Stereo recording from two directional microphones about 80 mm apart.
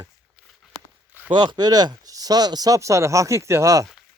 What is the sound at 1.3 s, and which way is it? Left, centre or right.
Speech, right.